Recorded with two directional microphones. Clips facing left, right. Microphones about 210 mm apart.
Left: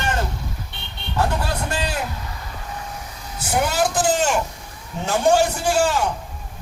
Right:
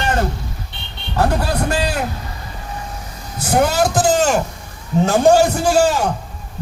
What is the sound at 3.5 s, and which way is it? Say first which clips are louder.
A man's voice: right 5 dB; 40° right (ahead or behind).